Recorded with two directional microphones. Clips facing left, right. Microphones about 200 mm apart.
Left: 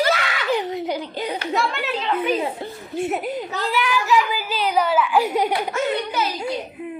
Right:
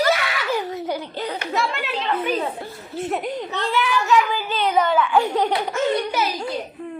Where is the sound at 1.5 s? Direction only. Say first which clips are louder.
Left 1 dB; centre (ahead or behind).